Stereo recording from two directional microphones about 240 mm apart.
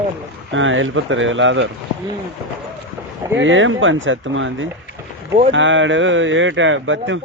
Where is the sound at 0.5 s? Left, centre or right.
Right.